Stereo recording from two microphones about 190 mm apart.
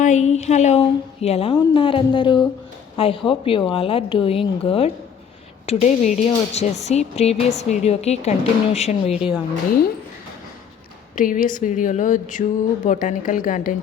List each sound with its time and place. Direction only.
0.0 s a woman's voice: 40° left (ahead or behind)
11.1 s speech: 45° left (ahead or behind)